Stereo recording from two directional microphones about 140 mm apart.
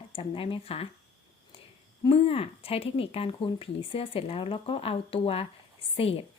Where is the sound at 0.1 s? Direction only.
40° left (ahead or behind).